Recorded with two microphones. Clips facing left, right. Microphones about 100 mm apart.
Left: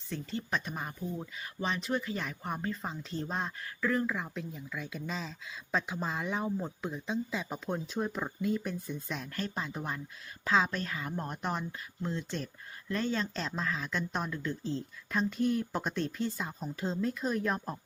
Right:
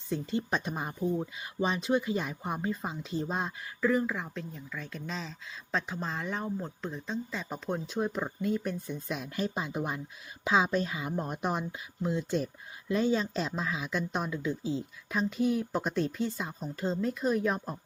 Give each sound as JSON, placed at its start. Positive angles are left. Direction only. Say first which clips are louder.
{"t": 0.1, "sound": "speech", "louder": "right 4 dB", "side_deg": -20}